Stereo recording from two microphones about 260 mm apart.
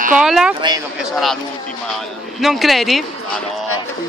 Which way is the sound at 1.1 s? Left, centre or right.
Centre.